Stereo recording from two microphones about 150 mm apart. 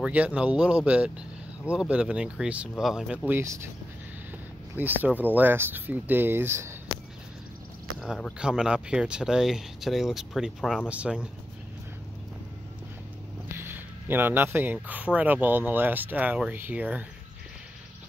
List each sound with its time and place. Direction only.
0.0 s speech: 10° right (ahead or behind)
3.3 s speech: 15° right (ahead or behind)
4.7 s speech: 10° right (ahead or behind)
8.0 s speech: 5° right (ahead or behind)
13.6 s speech: 15° right (ahead or behind)